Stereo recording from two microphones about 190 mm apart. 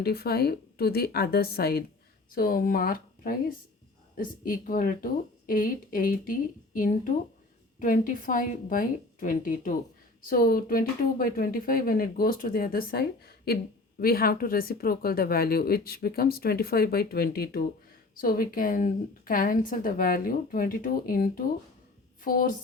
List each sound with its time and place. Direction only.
0.0 s a woman's voice: 55° left (ahead or behind)